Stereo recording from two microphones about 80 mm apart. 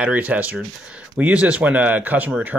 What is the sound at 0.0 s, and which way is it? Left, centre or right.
Speech, centre.